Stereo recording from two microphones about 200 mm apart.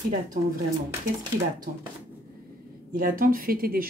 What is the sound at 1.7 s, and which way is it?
Speech, 45° right (ahead or behind).